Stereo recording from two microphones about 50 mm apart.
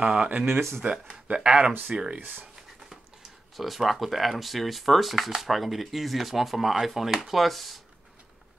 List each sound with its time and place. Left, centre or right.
0.0 s speech: right
0.8 s speech: right
1.2 s speech: centre
2.1 s speech: right
3.5 s speech: centre